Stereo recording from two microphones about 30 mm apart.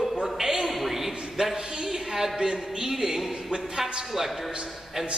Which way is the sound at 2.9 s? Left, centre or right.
Centre.